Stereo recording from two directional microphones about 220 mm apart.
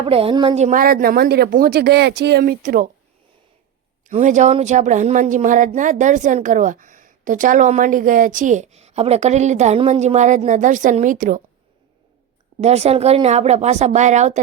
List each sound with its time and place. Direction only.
0.0 s speech: 25° right (ahead or behind)
4.0 s speech: 35° right (ahead or behind)
12.5 s speech: 30° right (ahead or behind)